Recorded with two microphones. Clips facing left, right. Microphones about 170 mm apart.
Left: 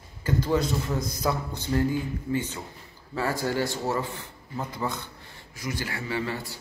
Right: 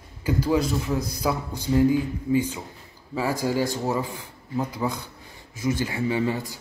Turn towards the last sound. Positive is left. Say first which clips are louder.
# right 6 dB
turn(degrees=-20)  # may be behind; listen again after turning